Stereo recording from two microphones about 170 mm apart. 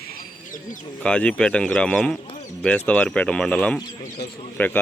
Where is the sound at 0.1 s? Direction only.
55° left (ahead or behind).